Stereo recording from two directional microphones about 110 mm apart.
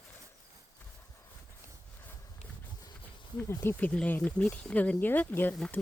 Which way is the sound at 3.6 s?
15° left (ahead or behind).